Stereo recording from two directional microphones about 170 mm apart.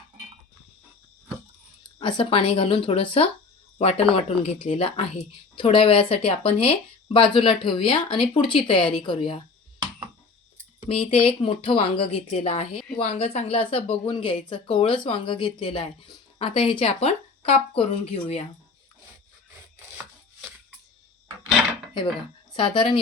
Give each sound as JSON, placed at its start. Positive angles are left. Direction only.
{"t": 2.0, "sound": "speech", "side_deg": 30}
{"t": 10.8, "sound": "speech", "side_deg": 35}
{"t": 22.5, "sound": "speech", "side_deg": 30}